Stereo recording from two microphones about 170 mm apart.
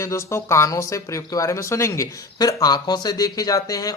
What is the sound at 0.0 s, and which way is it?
Speech, 15° left (ahead or behind).